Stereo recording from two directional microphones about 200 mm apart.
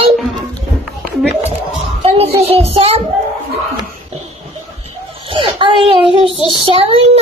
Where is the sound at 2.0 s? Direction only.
30° right (ahead or behind).